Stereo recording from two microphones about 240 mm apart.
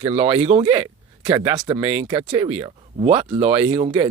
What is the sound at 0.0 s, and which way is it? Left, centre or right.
Speech, right.